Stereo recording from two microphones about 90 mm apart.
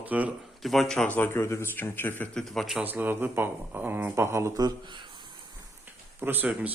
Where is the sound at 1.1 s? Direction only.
25° left (ahead or behind).